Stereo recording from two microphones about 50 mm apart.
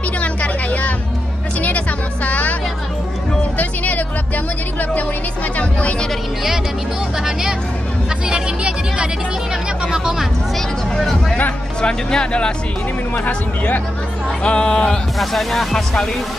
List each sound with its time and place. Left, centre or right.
0.2 s music: left
2.2 s music: left
3.5 s speech: left
5.6 s speech: left
8.3 s speech: centre
11.0 s speech: centre
11.8 s speech: centre
13.1 s speech: left
14.4 s speech: centre
15.1 s speech: centre